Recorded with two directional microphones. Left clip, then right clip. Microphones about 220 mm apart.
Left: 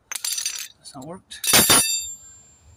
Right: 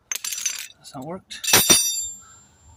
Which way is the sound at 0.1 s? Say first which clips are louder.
Even; 5° right (ahead or behind).